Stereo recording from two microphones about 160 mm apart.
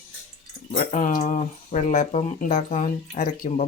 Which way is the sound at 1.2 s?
45° left (ahead or behind).